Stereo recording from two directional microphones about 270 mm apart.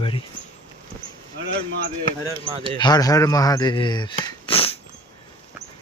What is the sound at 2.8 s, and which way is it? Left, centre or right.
Speech, centre.